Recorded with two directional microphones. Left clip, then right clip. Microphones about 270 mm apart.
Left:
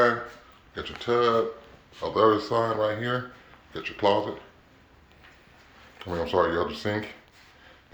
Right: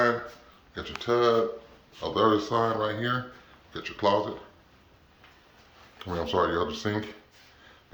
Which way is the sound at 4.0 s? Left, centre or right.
Centre.